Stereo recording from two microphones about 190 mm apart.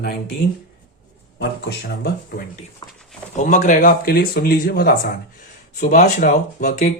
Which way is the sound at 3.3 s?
40° left (ahead or behind).